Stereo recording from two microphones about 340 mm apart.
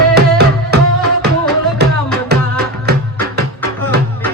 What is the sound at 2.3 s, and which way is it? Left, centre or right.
Music, right.